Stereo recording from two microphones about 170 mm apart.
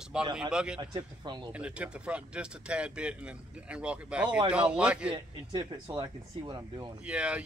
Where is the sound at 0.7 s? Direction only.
25° right (ahead or behind).